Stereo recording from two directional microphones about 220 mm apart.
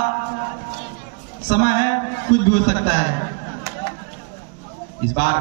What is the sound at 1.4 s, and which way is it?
A woman's voice, 35° left (ahead or behind).